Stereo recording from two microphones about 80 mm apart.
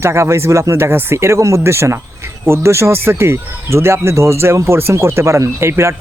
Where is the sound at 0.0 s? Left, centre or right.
Right.